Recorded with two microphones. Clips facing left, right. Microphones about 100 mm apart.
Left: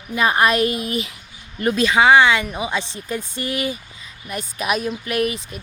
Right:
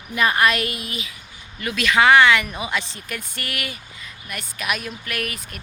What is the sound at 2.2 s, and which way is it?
Speech, 20° left (ahead or behind).